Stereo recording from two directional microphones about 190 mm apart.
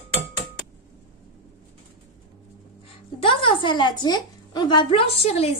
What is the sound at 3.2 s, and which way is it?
A woman's voice, 25° left (ahead or behind).